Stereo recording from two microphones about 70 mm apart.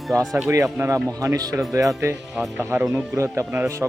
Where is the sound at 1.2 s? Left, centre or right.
Right.